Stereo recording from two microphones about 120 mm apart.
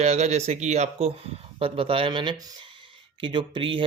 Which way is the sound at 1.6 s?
50° right (ahead or behind).